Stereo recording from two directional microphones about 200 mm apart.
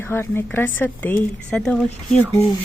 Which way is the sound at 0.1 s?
10° left (ahead or behind).